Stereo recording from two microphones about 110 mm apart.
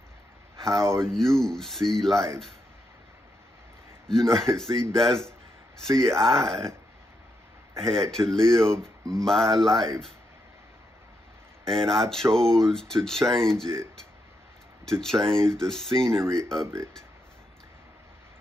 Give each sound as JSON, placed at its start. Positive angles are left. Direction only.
{"t": 0.7, "sound": "speech", "side_deg": -25}
{"t": 1.1, "sound": "speech", "side_deg": 5}
{"t": 4.1, "sound": "speech", "side_deg": 5}
{"t": 7.8, "sound": "speech", "side_deg": 5}
{"t": 8.7, "sound": "speech", "side_deg": -30}
{"t": 9.2, "sound": "speech", "side_deg": 5}
{"t": 11.6, "sound": "speech", "side_deg": 5}
{"t": 14.9, "sound": "speech", "side_deg": 5}